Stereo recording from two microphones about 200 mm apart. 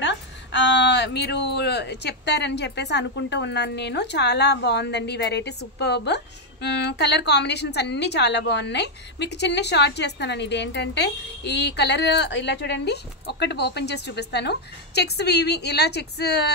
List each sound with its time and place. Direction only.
0.0 s a woman's voice: 60° left (ahead or behind)